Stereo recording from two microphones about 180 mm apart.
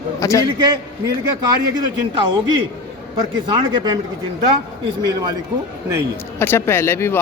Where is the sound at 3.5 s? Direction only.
25° right (ahead or behind).